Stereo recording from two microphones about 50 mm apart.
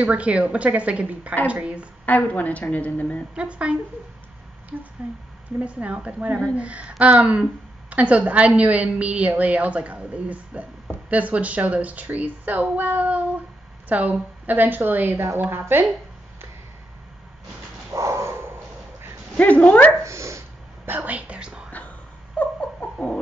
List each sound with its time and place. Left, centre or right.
0.0 s a woman's voice: right
2.0 s a woman's voice: left
3.3 s a woman's voice: right
5.0 s a woman's voice: right
17.9 s a sound: right
18.4 s a sound: right
19.3 s a woman's voice: left
20.0 s speech: right
21.0 s a woman's voice: right
21.6 s whispering: left
22.4 s a sound: left